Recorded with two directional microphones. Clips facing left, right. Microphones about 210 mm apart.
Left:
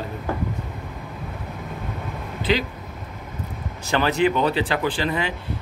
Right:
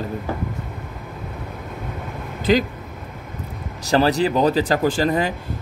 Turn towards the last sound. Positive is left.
turn(degrees=-40)  # may be behind; listen again after turning